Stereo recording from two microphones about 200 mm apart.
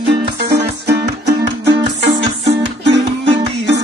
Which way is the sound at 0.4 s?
55° right (ahead or behind).